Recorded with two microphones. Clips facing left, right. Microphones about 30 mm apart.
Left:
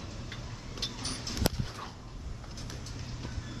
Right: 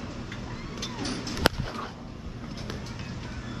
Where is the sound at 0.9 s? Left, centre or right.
Centre.